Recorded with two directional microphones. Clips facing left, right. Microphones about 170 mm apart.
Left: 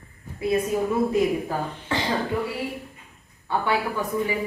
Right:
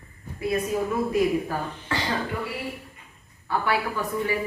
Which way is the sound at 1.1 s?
20° left (ahead or behind).